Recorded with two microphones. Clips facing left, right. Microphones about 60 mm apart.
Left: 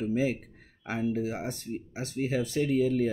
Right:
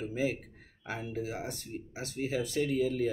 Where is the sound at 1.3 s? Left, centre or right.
Left.